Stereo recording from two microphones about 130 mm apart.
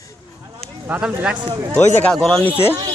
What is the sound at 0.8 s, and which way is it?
Speech, 15° right (ahead or behind).